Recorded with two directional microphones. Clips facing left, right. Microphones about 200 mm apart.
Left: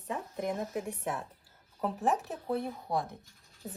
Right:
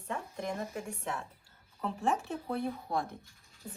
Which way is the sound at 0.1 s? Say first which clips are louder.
Left 3 dB; 5° left (ahead or behind).